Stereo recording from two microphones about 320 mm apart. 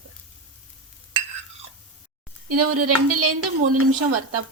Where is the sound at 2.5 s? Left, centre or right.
Right.